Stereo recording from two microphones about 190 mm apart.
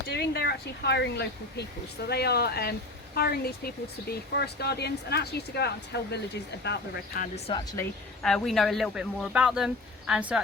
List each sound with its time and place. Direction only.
0.1 s speech: 60° left (ahead or behind)
7.2 s speech: 30° left (ahead or behind)
8.2 s speech: centre (ahead or behind)